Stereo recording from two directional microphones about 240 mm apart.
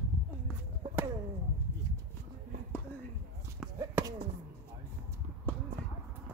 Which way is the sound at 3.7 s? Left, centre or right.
Centre.